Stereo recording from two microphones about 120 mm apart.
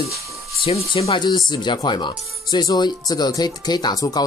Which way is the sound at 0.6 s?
55° left (ahead or behind).